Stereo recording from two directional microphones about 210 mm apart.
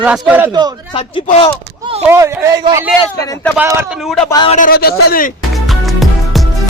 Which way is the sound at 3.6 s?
10° right (ahead or behind).